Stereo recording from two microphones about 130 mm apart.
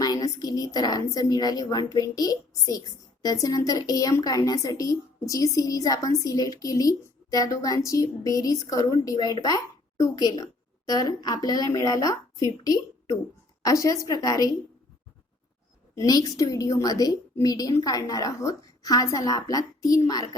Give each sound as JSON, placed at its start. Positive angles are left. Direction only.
{"t": 0.0, "sound": "speech", "side_deg": 30}
{"t": 16.0, "sound": "speech", "side_deg": 30}